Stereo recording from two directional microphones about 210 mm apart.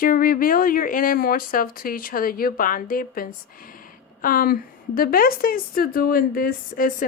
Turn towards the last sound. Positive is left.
turn(degrees=40)  # may be behind; listen again after turning